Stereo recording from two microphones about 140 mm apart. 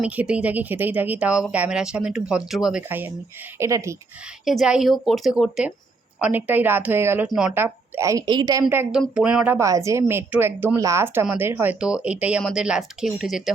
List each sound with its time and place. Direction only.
0.0 s a woman's voice: 10° right (ahead or behind)
4.4 s a woman's voice: 5° right (ahead or behind); by 8.6 s 30° right (ahead or behind)
8.9 s a woman's voice: 5° right (ahead or behind)